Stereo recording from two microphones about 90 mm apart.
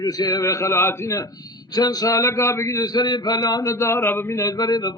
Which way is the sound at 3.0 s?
55° left (ahead or behind).